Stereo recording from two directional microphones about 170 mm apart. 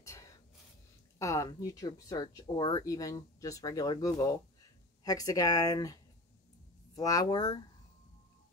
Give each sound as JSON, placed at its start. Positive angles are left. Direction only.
{"t": 0.0, "sound": "a sound", "side_deg": 20}
{"t": 1.2, "sound": "speech", "side_deg": 20}
{"t": 7.0, "sound": "speech", "side_deg": 20}